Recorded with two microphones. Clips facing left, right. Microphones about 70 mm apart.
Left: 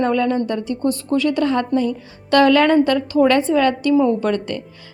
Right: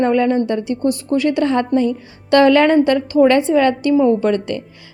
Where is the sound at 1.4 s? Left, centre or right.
Right.